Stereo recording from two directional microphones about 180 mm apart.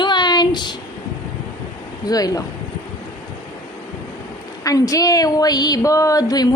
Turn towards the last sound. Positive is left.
turn(degrees=20)  # may be behind; listen again after turning